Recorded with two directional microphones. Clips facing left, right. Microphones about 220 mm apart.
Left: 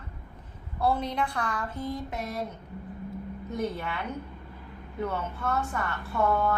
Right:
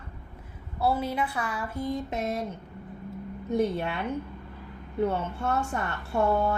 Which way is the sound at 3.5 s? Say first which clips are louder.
Right 6 dB; 25° right (ahead or behind).